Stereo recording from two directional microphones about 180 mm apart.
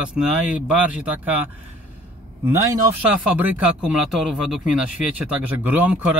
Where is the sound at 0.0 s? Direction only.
5° right (ahead or behind).